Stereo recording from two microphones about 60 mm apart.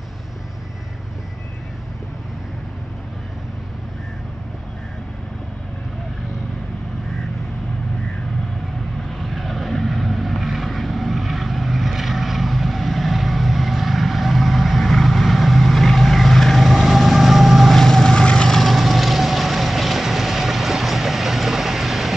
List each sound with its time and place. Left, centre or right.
9.2 s vehicle: centre